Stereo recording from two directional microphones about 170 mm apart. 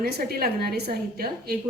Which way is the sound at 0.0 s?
65° right (ahead or behind).